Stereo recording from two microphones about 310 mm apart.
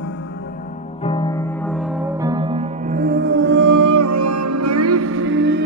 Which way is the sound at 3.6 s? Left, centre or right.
Right.